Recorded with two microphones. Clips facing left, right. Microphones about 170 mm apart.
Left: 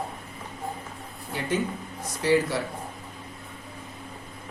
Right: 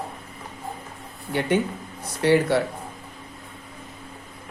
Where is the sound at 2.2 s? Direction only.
65° right (ahead or behind).